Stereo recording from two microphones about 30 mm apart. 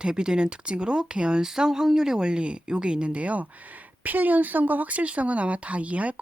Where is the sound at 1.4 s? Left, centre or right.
Centre.